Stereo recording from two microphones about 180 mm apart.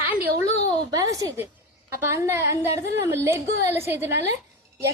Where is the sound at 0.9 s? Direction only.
20° right (ahead or behind).